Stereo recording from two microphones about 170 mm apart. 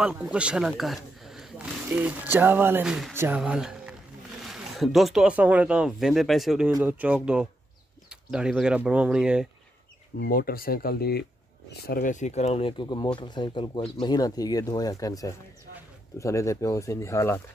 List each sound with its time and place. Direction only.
0.0 s speech: 5° right (ahead or behind)
10.1 s speech: 65° left (ahead or behind); by 17.4 s 15° left (ahead or behind)